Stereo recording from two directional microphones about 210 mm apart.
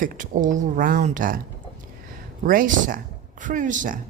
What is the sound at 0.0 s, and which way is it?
Speech, 40° right (ahead or behind).